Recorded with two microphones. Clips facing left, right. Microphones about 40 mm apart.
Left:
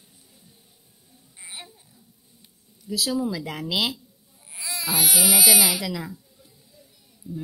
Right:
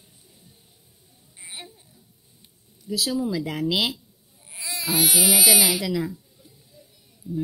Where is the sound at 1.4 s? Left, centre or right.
Centre.